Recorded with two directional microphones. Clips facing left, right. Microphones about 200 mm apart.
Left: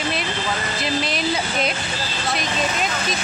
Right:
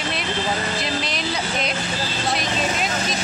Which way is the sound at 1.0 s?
5° left (ahead or behind).